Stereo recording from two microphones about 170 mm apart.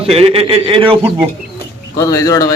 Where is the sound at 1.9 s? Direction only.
20° left (ahead or behind).